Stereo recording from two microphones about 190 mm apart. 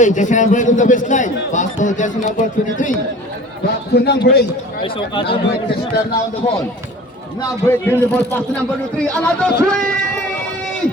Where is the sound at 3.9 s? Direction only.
60° left (ahead or behind).